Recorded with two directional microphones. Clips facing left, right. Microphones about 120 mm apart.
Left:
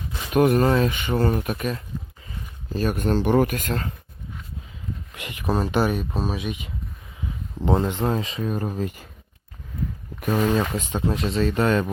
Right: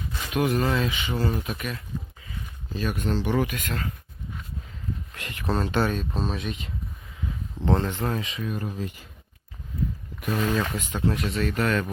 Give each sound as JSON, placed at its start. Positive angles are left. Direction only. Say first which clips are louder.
{"t": 0.3, "sound": "speech", "louder": "left 6 dB", "side_deg": 50}
{"t": 1.5, "sound": "speech", "louder": "left 6 dB", "side_deg": 35}
{"t": 2.7, "sound": "speech", "louder": "left 5 dB", "side_deg": 45}
{"t": 5.1, "sound": "a sound", "louder": "left 2 dB", "side_deg": 15}
{"t": 5.5, "sound": "speech", "louder": "left 3 dB", "side_deg": 5}
{"t": 5.7, "sound": "speech", "louder": "left 3 dB", "side_deg": 15}
{"t": 10.2, "sound": "a sound", "louder": "left 5 dB", "side_deg": 45}
{"t": 10.5, "sound": "speech", "louder": "left 4 dB", "side_deg": 25}